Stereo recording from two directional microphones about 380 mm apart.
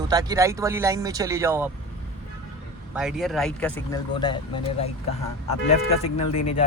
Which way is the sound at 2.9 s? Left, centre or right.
Centre.